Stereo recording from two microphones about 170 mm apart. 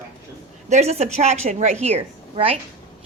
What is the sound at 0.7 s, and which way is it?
A woman's voice, 40° right (ahead or behind).